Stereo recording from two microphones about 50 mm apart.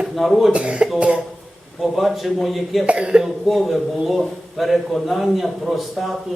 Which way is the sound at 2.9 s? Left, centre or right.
Centre.